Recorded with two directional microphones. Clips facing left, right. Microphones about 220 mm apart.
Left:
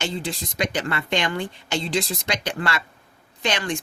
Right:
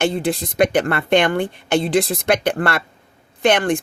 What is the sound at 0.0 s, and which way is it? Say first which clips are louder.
Speech: right 9 dB; 55° right (ahead or behind).